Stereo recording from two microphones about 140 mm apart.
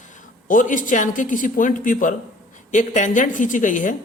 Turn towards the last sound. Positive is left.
turn(degrees=65)  # may be behind; listen again after turning